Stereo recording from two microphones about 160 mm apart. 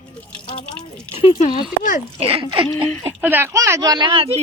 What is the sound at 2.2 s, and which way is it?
Speech, 35° right (ahead or behind).